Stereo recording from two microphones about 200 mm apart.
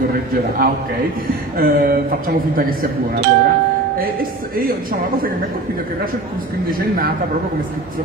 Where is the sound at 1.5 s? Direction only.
45° right (ahead or behind).